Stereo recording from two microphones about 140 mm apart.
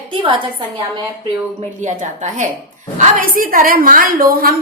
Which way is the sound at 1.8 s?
60° right (ahead or behind).